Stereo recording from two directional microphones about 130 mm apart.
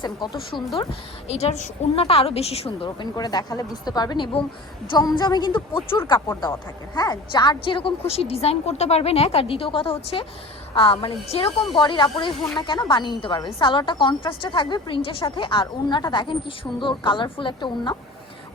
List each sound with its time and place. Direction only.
0.0 s speech: 35° left (ahead or behind)
0.8 s a woman's voice: 50° left (ahead or behind)